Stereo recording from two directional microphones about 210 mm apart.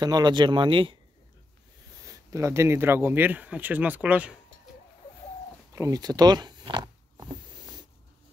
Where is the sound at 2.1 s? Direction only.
15° right (ahead or behind).